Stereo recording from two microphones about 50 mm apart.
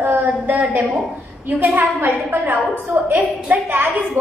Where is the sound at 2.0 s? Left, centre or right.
Right.